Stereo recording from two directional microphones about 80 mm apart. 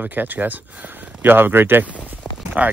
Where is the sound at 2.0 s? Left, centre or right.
Centre.